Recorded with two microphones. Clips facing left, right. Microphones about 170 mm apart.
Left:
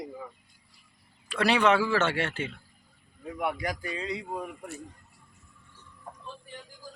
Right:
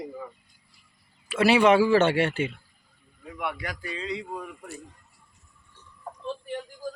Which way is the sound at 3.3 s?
40° left (ahead or behind).